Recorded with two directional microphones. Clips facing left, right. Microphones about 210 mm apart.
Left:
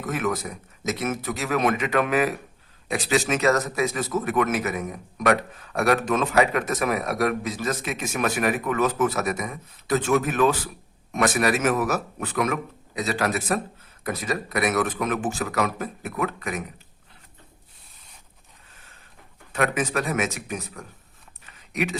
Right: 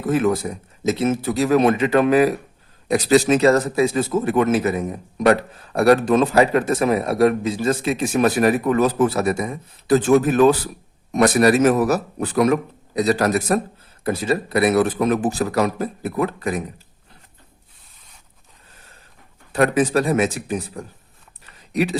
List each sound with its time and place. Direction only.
0.0 s speech: 30° right (ahead or behind)
14.0 s speech: 30° right (ahead or behind)
19.5 s speech: 35° right (ahead or behind)